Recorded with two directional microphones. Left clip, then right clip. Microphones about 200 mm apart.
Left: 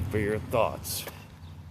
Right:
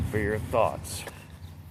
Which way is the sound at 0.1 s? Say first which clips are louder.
Even; 30° left (ahead or behind).